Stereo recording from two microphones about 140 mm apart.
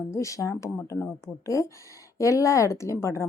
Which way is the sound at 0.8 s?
15° left (ahead or behind).